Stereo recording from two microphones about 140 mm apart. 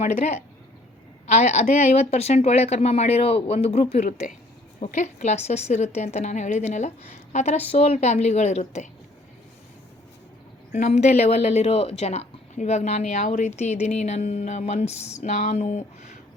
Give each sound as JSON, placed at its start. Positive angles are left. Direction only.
{"t": 0.0, "sound": "speech", "side_deg": 55}
{"t": 10.7, "sound": "speech", "side_deg": 55}